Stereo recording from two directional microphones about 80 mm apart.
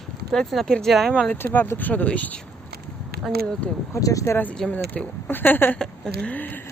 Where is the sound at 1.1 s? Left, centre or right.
Centre.